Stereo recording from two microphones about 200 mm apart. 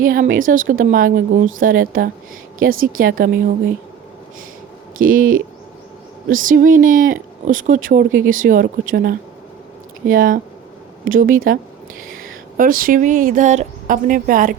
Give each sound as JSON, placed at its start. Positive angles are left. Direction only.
{"t": 0.0, "sound": "speech", "side_deg": -45}
{"t": 4.9, "sound": "speech", "side_deg": -45}
{"t": 12.5, "sound": "speech", "side_deg": -45}